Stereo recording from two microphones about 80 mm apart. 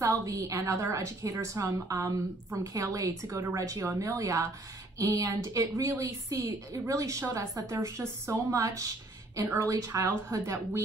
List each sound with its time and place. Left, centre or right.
0.0 s a woman's voice: right